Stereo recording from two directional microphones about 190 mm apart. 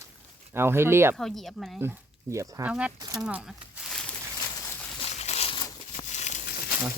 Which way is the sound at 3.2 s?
5° right (ahead or behind).